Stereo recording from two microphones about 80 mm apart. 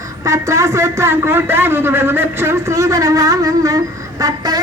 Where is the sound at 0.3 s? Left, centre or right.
Right.